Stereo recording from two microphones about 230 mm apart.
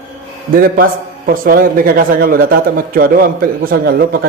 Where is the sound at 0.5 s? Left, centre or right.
Right.